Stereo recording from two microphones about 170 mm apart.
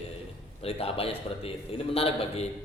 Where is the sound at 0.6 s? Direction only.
35° left (ahead or behind).